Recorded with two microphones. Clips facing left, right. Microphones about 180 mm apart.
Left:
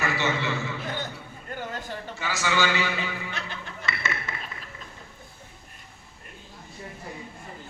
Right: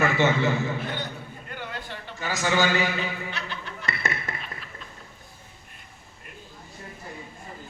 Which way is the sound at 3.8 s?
35° right (ahead or behind).